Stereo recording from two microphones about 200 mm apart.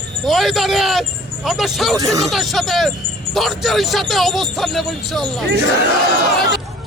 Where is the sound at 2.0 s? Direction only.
15° right (ahead or behind).